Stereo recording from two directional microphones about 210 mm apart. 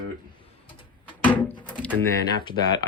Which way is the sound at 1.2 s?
5° left (ahead or behind).